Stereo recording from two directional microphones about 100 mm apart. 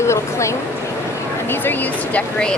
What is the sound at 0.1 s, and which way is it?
Speech, 30° left (ahead or behind).